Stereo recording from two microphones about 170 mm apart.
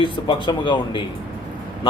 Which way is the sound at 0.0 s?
25° left (ahead or behind).